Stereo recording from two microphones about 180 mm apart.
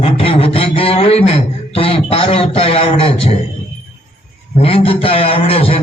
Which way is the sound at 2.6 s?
30° left (ahead or behind).